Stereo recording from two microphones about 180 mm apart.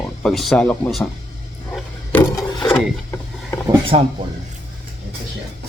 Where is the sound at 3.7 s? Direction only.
30° right (ahead or behind).